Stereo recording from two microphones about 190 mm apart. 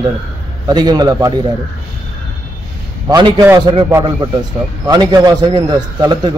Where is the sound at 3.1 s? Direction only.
20° right (ahead or behind).